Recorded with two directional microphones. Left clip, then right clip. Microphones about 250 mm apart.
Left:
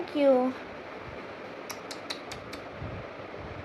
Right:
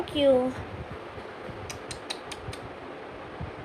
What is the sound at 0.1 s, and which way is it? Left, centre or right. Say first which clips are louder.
Speech: right 1 dB; left.